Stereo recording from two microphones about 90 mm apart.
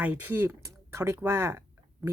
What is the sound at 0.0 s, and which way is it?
Speech, 20° right (ahead or behind).